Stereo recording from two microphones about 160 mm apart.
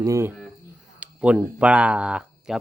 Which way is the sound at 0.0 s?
15° right (ahead or behind).